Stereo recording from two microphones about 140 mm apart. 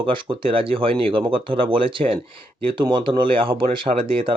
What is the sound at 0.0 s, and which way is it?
Speech, 35° right (ahead or behind).